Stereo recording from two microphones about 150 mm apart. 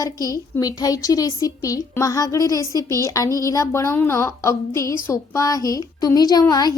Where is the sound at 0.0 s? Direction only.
25° left (ahead or behind).